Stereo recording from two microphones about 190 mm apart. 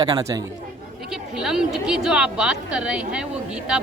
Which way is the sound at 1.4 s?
5° right (ahead or behind).